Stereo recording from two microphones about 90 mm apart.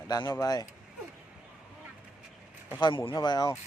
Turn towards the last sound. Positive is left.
turn(degrees=50)  # may be behind; listen again after turning